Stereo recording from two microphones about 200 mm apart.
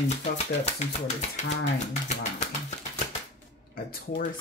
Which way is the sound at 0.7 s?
35° left (ahead or behind).